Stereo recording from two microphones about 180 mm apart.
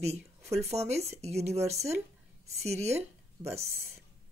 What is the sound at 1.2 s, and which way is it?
Speech, 35° right (ahead or behind).